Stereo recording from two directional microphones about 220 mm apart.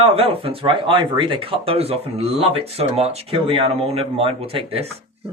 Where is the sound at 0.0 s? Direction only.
25° right (ahead or behind).